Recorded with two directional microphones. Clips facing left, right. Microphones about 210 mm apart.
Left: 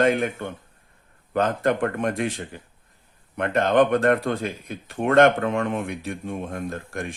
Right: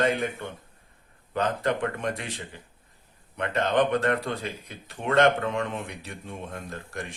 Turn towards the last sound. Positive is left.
turn(degrees=50)  # may be behind; listen again after turning